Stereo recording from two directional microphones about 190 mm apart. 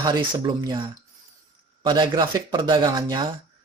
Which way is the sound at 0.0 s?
20° right (ahead or behind).